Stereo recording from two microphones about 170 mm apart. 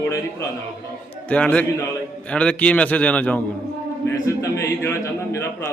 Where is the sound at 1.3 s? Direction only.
5° left (ahead or behind).